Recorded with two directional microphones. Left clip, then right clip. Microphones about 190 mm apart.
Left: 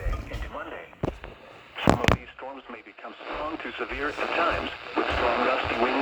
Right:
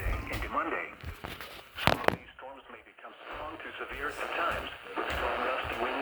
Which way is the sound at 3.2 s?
50° left (ahead or behind).